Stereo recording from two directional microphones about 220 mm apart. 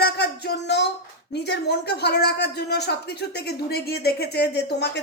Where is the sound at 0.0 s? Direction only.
45° left (ahead or behind).